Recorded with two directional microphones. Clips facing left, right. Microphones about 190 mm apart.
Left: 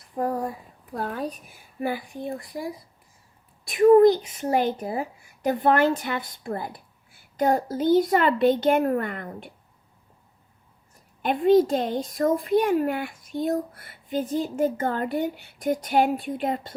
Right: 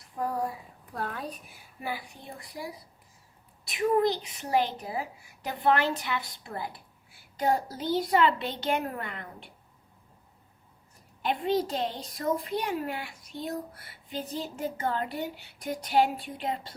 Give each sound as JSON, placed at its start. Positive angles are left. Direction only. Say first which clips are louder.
{"t": 0.2, "sound": "speech", "louder": "left 6 dB", "side_deg": 45}
{"t": 0.9, "sound": "a woman's voice", "louder": "left 5 dB", "side_deg": 35}
{"t": 1.8, "sound": "a child's voice", "louder": "left 9 dB", "side_deg": 50}
{"t": 11.2, "sound": "a child's voice", "louder": "left 9 dB", "side_deg": 50}